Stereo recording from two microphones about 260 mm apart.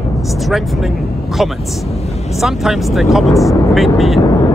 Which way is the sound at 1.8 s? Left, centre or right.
Left.